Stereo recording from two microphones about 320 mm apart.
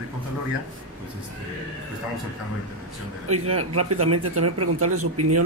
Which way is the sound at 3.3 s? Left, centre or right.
Right.